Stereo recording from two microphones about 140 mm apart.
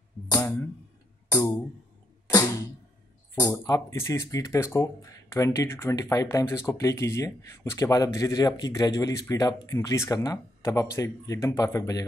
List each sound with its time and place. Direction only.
2.2 s music: 20° left (ahead or behind)
3.3 s speech: 25° left (ahead or behind)